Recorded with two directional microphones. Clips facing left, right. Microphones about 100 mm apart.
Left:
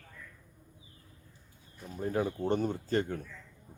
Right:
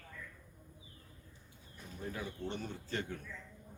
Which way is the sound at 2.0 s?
45° left (ahead or behind).